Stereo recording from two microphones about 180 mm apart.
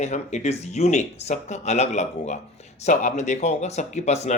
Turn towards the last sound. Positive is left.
turn(degrees=40)  # may be behind; listen again after turning